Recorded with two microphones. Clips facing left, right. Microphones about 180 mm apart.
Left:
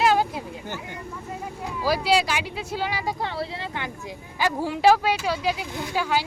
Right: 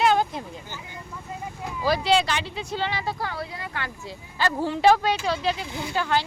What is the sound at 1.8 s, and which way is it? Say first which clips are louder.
A woman's voice: even; 10° left (ahead or behind).